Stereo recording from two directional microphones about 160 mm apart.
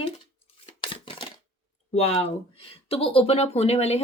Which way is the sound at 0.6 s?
30° left (ahead or behind).